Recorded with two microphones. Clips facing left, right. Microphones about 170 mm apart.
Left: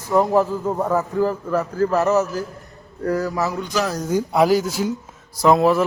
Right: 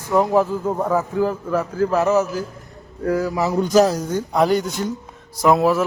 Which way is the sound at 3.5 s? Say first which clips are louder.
Right 8 dB; 40° right (ahead or behind).